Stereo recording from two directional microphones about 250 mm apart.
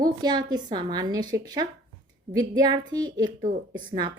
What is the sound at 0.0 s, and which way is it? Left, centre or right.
A woman's voice, centre.